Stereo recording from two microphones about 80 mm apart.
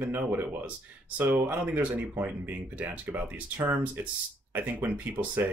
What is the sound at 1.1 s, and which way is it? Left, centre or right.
Speech, right.